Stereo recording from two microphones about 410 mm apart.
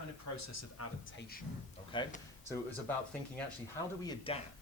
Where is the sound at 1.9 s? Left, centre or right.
Centre.